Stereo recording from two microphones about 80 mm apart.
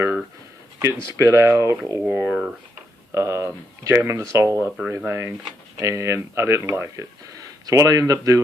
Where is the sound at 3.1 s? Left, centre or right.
Right.